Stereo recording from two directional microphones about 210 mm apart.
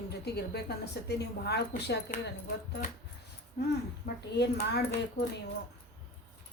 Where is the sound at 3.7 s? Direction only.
50° left (ahead or behind).